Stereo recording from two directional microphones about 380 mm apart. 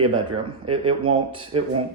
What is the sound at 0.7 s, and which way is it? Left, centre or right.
Speech, centre.